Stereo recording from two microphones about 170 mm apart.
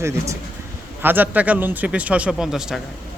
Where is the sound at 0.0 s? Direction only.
15° right (ahead or behind).